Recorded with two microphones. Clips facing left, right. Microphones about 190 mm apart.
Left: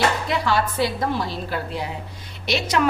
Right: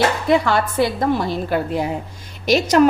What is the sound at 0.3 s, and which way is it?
A woman's voice, 55° right (ahead or behind).